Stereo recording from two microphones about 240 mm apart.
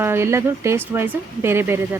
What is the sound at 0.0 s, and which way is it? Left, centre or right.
Speech, centre.